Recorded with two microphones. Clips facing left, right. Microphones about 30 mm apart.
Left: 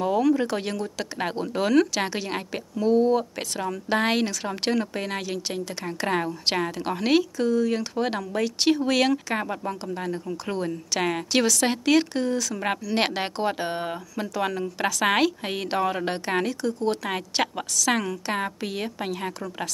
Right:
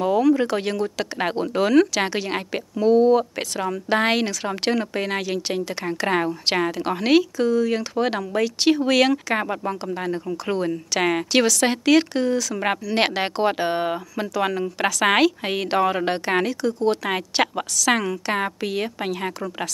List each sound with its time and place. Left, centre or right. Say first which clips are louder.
0.0 s a woman's voice: right 3 dB; centre
2.0 s a woman's voice: right 4 dB; centre
14.2 s speech: right 3 dB; centre